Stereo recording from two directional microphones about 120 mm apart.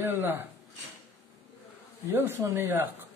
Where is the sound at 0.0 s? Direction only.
20° right (ahead or behind).